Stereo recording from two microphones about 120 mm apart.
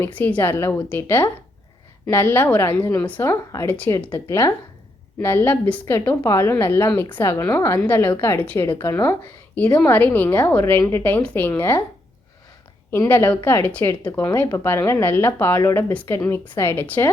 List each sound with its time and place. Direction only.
0.0 s a woman's voice: 15° left (ahead or behind)
10.2 s a woman's voice: 25° left (ahead or behind)
12.9 s a woman's voice: 20° left (ahead or behind)